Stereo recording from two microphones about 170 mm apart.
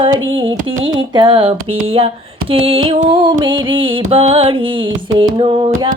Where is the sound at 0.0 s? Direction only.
30° right (ahead or behind).